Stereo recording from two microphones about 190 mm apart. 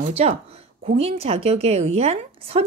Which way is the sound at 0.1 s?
35° right (ahead or behind).